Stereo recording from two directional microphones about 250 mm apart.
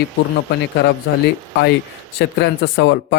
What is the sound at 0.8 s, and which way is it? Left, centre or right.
A man's voice, left.